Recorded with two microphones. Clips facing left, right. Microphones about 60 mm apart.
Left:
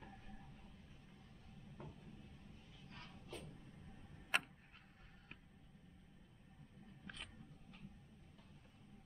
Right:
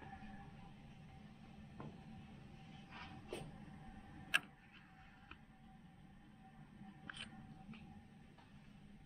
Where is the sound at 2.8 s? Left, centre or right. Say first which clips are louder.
Right 4 dB; right.